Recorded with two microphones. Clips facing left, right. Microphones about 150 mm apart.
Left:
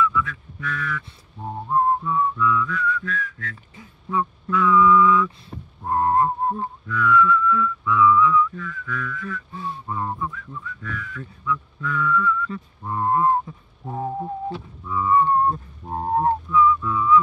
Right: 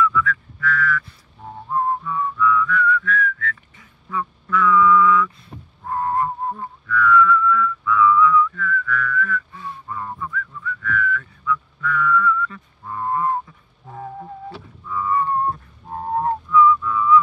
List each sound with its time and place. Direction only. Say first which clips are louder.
0.0 s a sound: right 2 dB; 20° left (ahead or behind)
1.7 s whistling: left 2 dB; 25° left (ahead or behind)
13.8 s music: left 6 dB; 30° left (ahead or behind)
16.2 s whistling: right 2 dB; 30° left (ahead or behind)